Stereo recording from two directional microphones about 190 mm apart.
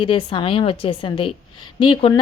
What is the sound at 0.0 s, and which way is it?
A woman's voice, 25° left (ahead or behind).